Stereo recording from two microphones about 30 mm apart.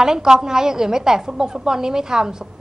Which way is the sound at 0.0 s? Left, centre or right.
Centre.